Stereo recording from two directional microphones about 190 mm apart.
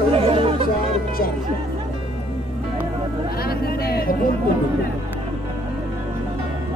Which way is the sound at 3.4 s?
55° left (ahead or behind).